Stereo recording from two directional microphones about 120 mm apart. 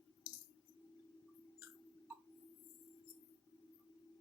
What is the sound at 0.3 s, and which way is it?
Coin, 50° right (ahead or behind).